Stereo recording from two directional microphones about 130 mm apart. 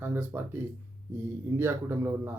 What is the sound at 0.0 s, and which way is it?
Speech, 20° right (ahead or behind).